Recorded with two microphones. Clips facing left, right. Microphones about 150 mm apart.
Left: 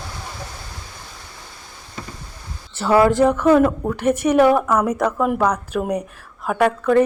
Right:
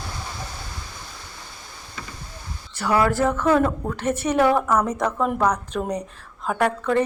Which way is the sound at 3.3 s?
10° left (ahead or behind).